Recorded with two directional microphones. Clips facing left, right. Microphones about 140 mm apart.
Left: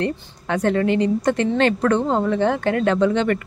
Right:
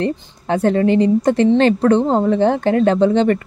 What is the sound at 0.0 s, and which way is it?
A woman's voice, 30° right (ahead or behind).